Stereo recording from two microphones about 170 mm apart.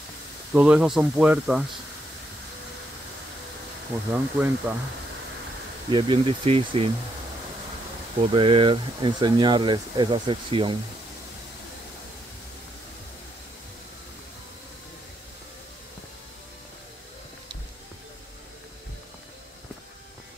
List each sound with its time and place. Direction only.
0.5 s speech: 10° right (ahead or behind)
4.1 s speech: 10° right (ahead or behind)
5.9 s speech: 30° right (ahead or behind)
8.3 s speech: 30° right (ahead or behind)